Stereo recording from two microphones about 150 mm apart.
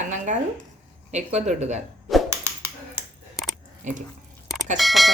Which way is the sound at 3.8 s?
55° right (ahead or behind).